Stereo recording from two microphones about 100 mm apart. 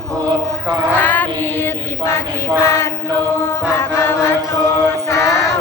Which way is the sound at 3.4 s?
25° left (ahead or behind).